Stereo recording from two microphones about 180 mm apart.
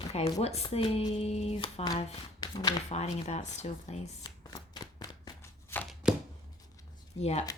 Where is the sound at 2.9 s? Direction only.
35° left (ahead or behind).